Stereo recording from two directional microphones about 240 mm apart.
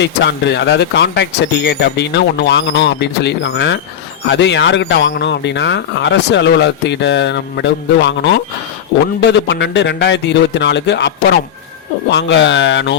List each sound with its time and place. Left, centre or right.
0.0 s a man's voice: left